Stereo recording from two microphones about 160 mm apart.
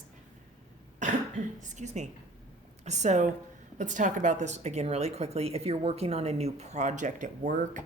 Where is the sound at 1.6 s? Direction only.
50° right (ahead or behind).